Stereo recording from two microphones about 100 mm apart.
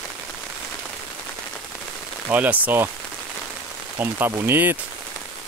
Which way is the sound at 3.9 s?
20° right (ahead or behind).